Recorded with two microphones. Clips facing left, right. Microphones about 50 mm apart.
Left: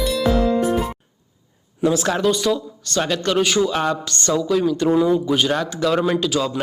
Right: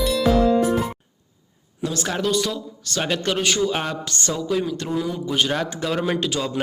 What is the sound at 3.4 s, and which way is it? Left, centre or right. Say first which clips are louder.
Speech: left 3 dB; centre.